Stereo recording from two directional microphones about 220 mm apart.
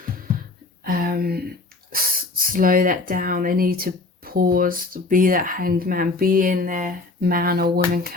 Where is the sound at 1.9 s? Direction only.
40° right (ahead or behind).